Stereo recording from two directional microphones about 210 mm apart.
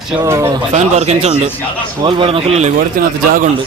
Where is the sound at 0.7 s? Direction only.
30° right (ahead or behind).